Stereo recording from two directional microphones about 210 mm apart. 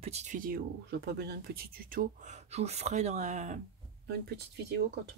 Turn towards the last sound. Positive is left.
turn(degrees=-50)  # may be behind; listen again after turning